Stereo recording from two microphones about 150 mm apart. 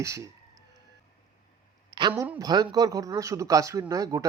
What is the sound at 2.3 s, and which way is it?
Speech, 25° right (ahead or behind).